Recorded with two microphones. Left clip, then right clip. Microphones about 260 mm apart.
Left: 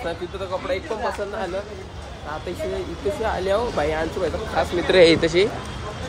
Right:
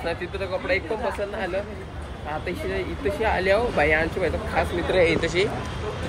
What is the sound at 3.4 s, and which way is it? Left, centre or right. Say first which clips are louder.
Speech: right 2 dB; centre.